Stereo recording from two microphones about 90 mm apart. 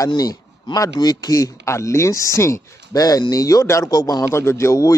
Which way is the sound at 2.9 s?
45° left (ahead or behind).